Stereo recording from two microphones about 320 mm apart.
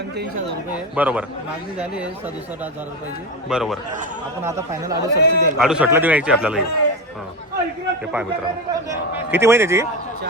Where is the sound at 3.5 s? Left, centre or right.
Centre.